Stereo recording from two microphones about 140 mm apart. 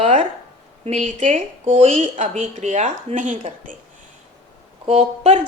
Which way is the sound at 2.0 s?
60° right (ahead or behind).